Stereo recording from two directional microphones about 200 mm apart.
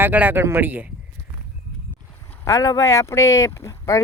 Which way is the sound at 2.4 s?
15° left (ahead or behind).